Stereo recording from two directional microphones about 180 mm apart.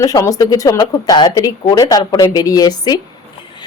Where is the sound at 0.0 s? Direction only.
20° left (ahead or behind).